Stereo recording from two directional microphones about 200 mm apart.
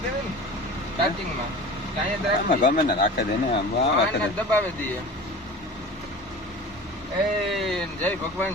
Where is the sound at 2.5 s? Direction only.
40° left (ahead or behind).